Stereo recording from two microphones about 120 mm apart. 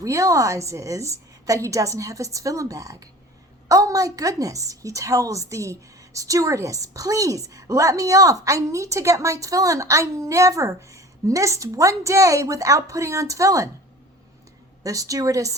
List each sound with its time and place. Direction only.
0.0 s a woman's voice: 25° right (ahead or behind)
14.8 s a woman's voice: 30° right (ahead or behind)